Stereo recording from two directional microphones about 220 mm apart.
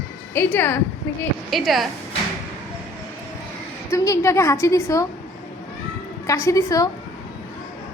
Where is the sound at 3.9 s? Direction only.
15° left (ahead or behind).